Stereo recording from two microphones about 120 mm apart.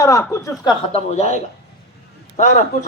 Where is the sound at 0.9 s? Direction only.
70° left (ahead or behind).